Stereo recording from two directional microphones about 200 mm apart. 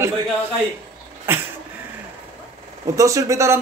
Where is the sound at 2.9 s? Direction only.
15° right (ahead or behind).